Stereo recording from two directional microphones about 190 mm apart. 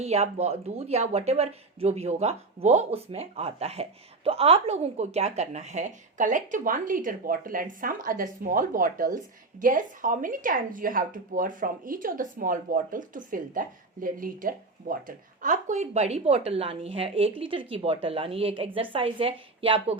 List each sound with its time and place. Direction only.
0.0 s speech: 35° right (ahead or behind)